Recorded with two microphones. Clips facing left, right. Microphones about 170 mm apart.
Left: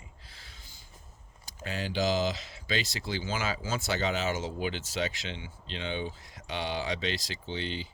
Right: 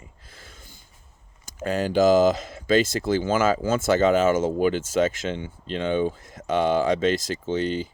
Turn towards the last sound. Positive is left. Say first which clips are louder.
# right 11 dB
turn(degrees=-45)  # may be behind; listen again after turning